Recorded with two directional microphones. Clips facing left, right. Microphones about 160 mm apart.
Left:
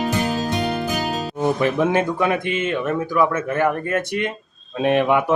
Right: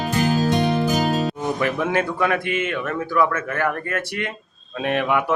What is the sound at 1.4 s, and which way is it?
Speech, 20° left (ahead or behind).